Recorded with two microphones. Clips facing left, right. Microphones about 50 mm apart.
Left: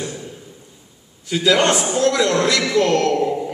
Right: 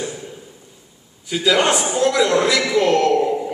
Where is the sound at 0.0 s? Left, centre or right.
Centre.